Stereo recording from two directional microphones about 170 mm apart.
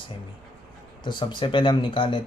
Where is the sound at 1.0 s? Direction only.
25° left (ahead or behind).